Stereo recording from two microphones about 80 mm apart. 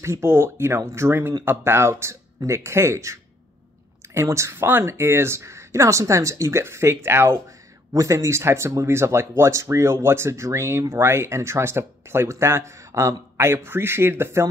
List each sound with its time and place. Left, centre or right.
0.0 s speech: right
7.9 s speech: right